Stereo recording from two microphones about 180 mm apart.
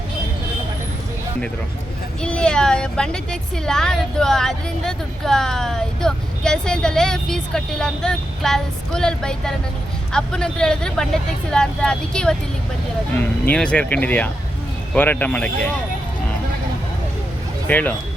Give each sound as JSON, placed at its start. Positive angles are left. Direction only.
{"t": 2.2, "sound": "speech", "side_deg": 5}
{"t": 17.7, "sound": "speech", "side_deg": 10}